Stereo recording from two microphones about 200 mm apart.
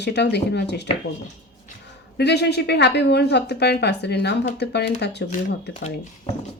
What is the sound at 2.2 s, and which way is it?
A woman's voice, 55° left (ahead or behind).